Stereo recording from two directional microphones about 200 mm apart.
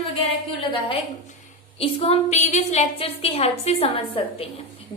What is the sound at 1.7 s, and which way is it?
A woman's voice, 30° left (ahead or behind).